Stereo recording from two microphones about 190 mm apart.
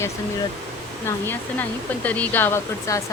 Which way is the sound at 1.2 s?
10° left (ahead or behind).